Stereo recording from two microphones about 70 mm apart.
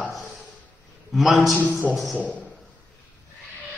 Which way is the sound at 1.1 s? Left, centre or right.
Centre.